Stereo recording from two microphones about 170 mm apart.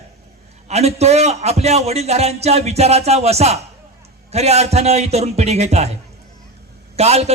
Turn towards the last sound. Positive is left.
turn(degrees=-40)  # may be behind; listen again after turning